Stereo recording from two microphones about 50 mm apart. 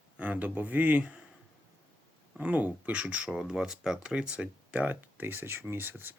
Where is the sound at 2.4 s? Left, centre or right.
Right.